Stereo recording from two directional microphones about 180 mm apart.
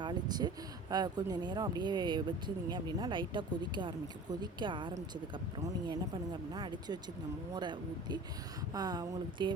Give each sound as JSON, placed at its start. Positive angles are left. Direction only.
{"t": 0.0, "sound": "speech", "side_deg": -20}
{"t": 6.5, "sound": "speech", "side_deg": -25}